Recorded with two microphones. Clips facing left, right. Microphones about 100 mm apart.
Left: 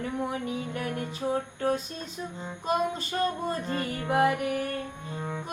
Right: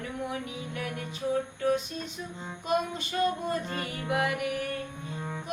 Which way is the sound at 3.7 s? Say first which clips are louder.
Left 4 dB; 35° left (ahead or behind).